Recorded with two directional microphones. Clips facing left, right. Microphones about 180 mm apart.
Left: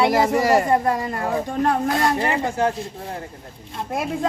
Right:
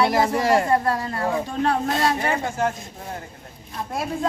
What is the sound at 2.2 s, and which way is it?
Speech, 35° left (ahead or behind).